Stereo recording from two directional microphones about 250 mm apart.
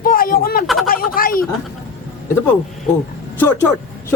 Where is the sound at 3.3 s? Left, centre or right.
Centre.